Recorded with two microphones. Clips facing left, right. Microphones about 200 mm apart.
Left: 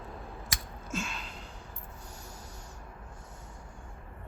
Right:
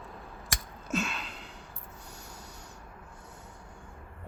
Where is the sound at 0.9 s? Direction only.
65° right (ahead or behind).